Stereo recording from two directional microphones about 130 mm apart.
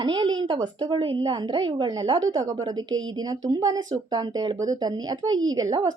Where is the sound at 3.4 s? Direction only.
30° right (ahead or behind).